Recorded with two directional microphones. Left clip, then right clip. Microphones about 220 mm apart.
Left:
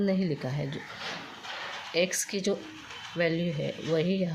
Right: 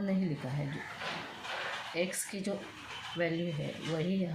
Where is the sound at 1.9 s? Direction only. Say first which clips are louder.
Left 11 dB; 50° left (ahead or behind).